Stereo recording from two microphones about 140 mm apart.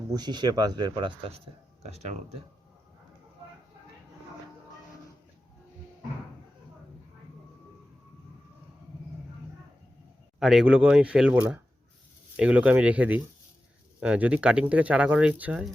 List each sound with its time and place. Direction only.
0.1 s speech: 30° right (ahead or behind)
1.8 s speech: 50° right (ahead or behind)
10.4 s speech: centre (ahead or behind)